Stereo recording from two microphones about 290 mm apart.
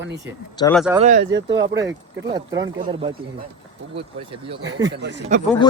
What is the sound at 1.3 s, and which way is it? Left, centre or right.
Speech, right.